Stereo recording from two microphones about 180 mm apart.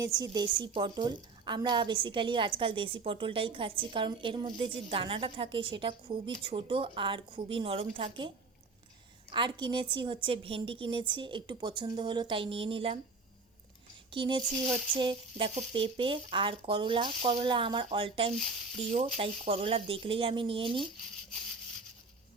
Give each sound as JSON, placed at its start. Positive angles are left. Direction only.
{"t": 0.0, "sound": "a woman's voice", "side_deg": -20}
{"t": 9.3, "sound": "a woman's voice", "side_deg": -25}
{"t": 14.1, "sound": "a woman's voice", "side_deg": -25}